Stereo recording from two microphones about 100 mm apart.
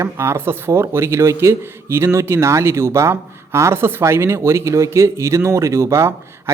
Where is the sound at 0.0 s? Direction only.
25° right (ahead or behind).